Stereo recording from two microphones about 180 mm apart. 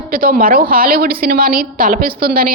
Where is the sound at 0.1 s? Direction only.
55° right (ahead or behind).